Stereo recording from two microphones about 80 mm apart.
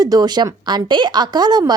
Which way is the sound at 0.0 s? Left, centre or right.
Right.